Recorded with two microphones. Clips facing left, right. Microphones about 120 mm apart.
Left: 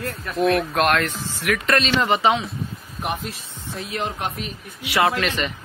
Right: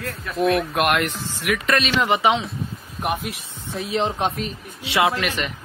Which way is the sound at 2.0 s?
15° right (ahead or behind).